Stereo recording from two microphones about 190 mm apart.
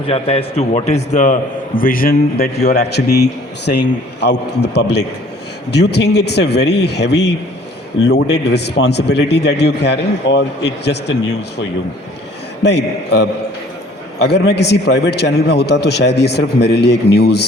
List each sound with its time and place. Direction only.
0.1 s a man's voice: 30° left (ahead or behind); by 11.1 s 65° left (ahead or behind)
12.6 s a man's voice: 60° left (ahead or behind)